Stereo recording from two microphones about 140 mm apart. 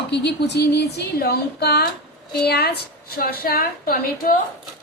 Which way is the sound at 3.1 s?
90° left.